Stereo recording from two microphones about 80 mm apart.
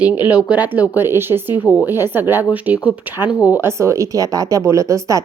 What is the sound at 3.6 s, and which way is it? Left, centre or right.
Speech, right.